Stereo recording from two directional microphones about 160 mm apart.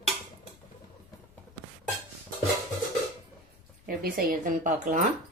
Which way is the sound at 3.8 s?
65° right (ahead or behind).